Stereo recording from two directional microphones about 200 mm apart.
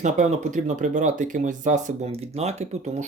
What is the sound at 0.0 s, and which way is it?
Speech, 35° right (ahead or behind).